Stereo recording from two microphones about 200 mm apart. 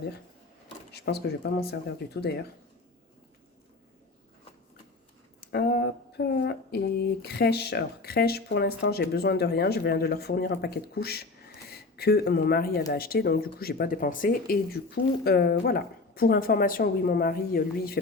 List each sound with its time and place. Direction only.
0.9 s speech: 55° left (ahead or behind)
5.4 s speech: 55° left (ahead or behind)